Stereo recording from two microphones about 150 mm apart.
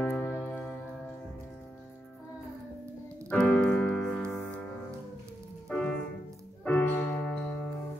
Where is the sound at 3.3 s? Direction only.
5° left (ahead or behind).